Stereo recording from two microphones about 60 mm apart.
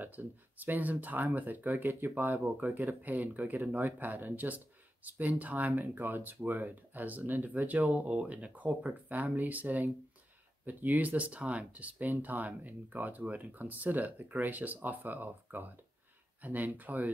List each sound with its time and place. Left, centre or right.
0.0 s speech: right